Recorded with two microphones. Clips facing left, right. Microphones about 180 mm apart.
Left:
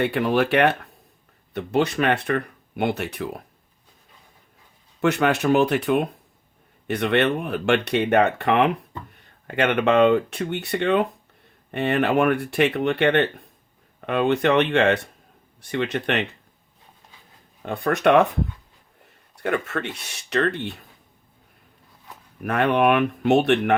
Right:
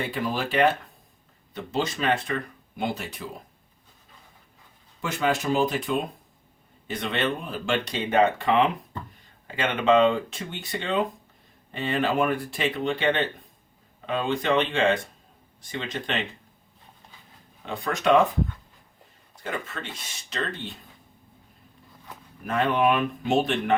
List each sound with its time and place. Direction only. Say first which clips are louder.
0.0 s speech: left 8 dB; 65° left (ahead or behind)
4.9 s speech: left 6 dB; 70° left (ahead or behind)
17.7 s speech: left 3 dB; 60° left (ahead or behind)
19.4 s speech: left 8 dB; 65° left (ahead or behind)
22.4 s speech: left 4 dB; 65° left (ahead or behind)